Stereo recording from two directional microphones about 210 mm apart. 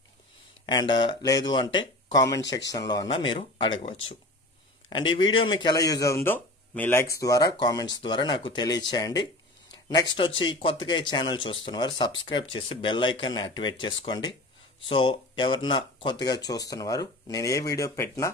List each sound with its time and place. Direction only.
0.7 s speech: 20° left (ahead or behind)